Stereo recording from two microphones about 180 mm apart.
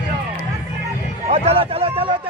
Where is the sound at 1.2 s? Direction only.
35° right (ahead or behind).